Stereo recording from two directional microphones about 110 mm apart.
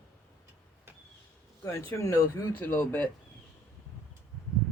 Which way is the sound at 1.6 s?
25° left (ahead or behind).